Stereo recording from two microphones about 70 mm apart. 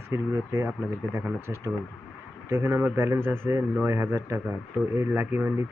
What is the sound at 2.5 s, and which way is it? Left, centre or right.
Speech, right.